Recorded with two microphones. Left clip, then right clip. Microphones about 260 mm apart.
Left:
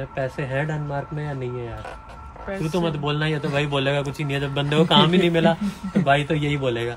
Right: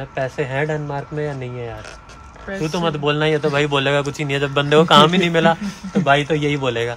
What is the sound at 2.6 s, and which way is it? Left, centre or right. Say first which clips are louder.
Speech: right 4 dB; centre.